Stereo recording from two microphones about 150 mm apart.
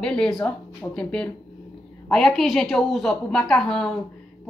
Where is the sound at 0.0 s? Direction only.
5° left (ahead or behind).